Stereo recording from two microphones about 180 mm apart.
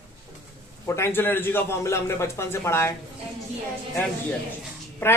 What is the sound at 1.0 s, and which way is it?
A man's voice, 10° left (ahead or behind).